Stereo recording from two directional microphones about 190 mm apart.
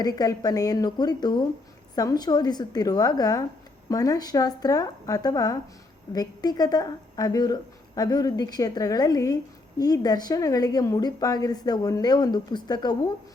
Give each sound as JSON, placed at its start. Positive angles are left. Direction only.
{"t": 0.0, "sound": "a woman's voice", "side_deg": 20}